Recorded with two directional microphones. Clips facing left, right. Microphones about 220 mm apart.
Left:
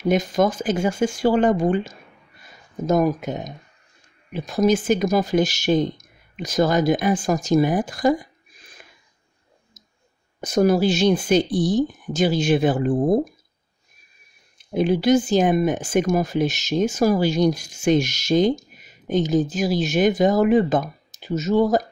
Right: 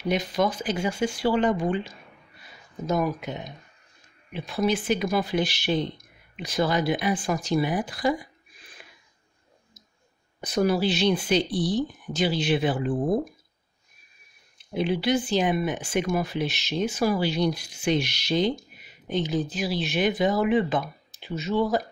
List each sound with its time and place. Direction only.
0.0 s speech: 45° left (ahead or behind)
10.4 s speech: 45° left (ahead or behind)
14.7 s speech: 45° left (ahead or behind)